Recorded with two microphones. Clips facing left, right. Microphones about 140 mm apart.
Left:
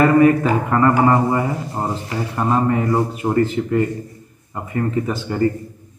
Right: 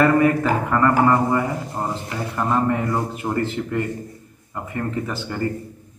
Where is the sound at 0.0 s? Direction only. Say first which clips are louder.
Left 4 dB; 10° left (ahead or behind).